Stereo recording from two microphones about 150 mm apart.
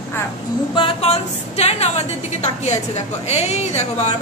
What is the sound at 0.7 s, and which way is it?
A woman's voice, 40° left (ahead or behind).